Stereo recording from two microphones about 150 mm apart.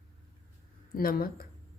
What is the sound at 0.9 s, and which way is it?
Speech, 75° left (ahead or behind).